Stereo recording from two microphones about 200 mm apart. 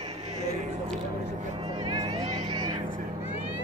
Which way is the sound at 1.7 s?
25° right (ahead or behind).